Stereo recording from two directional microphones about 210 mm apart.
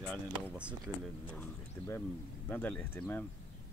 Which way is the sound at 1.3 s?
10° left (ahead or behind).